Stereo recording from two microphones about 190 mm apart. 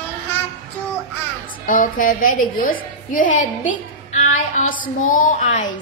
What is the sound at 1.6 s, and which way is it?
A woman's voice, 45° left (ahead or behind).